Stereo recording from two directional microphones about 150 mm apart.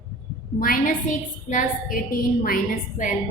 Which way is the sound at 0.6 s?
70° left (ahead or behind).